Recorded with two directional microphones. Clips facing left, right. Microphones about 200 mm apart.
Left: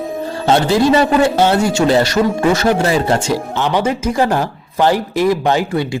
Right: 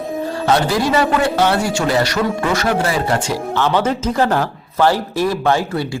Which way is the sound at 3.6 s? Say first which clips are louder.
Right 2 dB; 15° left (ahead or behind).